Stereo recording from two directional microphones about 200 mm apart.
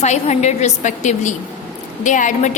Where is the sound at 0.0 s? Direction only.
35° left (ahead or behind).